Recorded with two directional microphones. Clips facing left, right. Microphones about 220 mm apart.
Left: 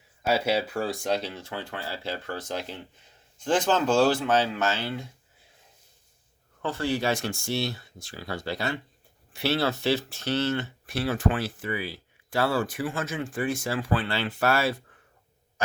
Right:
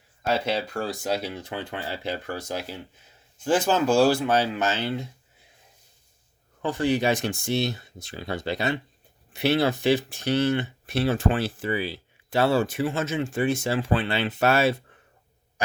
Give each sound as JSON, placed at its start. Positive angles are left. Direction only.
{"t": 0.2, "sound": "speech", "side_deg": 10}
{"t": 6.6, "sound": "speech", "side_deg": -15}